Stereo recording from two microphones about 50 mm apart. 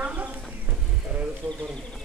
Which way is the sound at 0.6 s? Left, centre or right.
Right.